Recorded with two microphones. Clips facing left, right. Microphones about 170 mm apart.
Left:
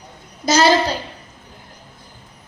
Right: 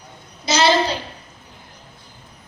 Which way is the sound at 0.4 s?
45° left (ahead or behind).